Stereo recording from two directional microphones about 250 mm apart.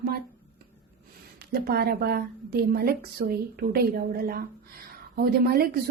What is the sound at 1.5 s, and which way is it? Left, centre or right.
A woman's voice, right.